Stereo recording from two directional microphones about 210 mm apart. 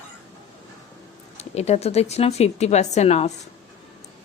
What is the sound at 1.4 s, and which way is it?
A woman's voice, 30° left (ahead or behind).